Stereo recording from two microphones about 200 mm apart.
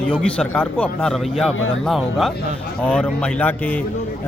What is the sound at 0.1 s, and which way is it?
A man's voice, 5° left (ahead or behind).